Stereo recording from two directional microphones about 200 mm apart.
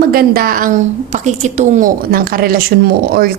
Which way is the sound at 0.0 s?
50° right (ahead or behind).